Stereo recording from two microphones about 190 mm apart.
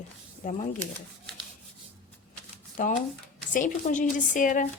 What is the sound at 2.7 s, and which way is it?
Speech, 40° left (ahead or behind).